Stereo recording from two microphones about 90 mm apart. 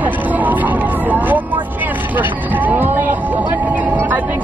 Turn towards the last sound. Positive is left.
turn(degrees=-20)  # may be behind; listen again after turning